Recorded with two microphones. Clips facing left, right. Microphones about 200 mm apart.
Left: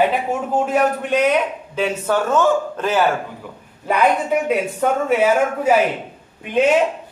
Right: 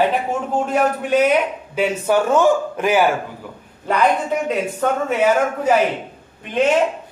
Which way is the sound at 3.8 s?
5° left (ahead or behind).